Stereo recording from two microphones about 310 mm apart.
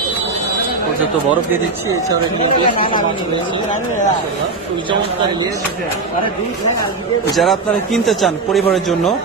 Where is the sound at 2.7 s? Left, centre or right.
Centre.